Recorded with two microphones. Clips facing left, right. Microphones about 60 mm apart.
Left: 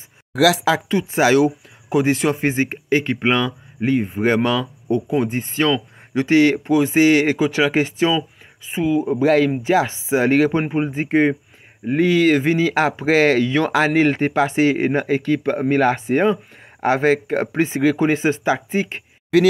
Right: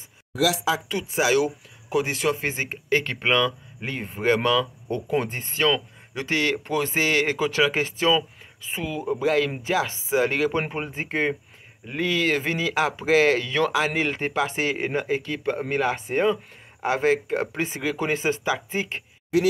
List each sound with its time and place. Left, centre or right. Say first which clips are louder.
0.4 s speech: left 7 dB; left
0.8 s speech: left 7 dB; left
2.9 s speech: left 3 dB; centre
9.2 s speech: left 6 dB; left
9.6 s speech: left 7 dB; left
10.6 s speech: left 8 dB; centre
10.9 s speech: left 8 dB; left